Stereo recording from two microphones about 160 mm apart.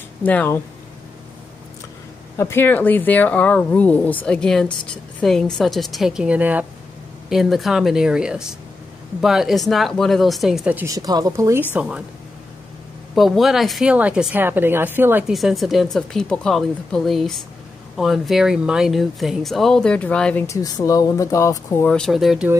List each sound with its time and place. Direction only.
0.2 s speech: 10° left (ahead or behind)
2.3 s speech: 15° left (ahead or behind); by 10.9 s 10° right (ahead or behind)
10.9 s speech: 25° right (ahead or behind)
11.7 s a woman's voice: 10° right (ahead or behind)
13.1 s a woman's voice: centre (ahead or behind)
15.3 s speech: centre (ahead or behind)
20.4 s speech: 20° left (ahead or behind); by 22.5 s centre (ahead or behind)